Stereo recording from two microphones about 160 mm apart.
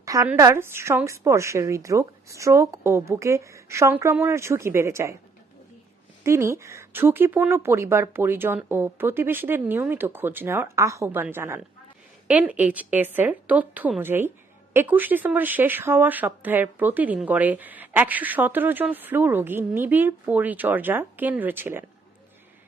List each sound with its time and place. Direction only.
0.0 s a sound: 20° right (ahead or behind)
0.3 s speech: 15° right (ahead or behind)
6.2 s speech: 15° right (ahead or behind)